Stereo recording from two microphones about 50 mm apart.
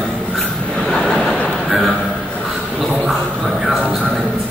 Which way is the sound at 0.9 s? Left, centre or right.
Centre.